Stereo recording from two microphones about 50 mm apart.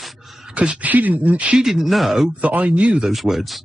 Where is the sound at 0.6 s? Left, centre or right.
Right.